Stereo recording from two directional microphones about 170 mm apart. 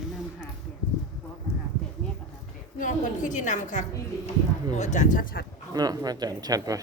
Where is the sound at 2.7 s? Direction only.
50° left (ahead or behind).